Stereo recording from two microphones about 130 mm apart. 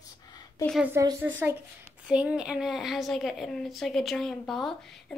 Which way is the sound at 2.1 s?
10° right (ahead or behind).